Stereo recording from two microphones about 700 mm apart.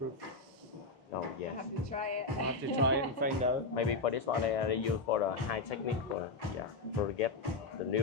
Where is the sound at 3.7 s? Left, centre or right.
Left.